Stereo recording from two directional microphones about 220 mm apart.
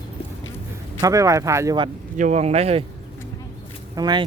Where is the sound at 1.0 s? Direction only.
15° right (ahead or behind).